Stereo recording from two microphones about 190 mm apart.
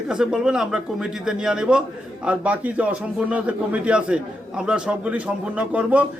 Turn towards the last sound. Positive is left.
turn(degrees=-5)  # may be behind; listen again after turning